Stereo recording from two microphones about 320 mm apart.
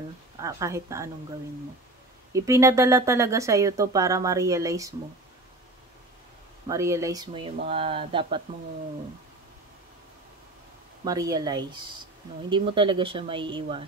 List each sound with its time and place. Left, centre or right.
0.4 s speech: centre
2.3 s speech: centre
6.7 s speech: centre
11.1 s speech: centre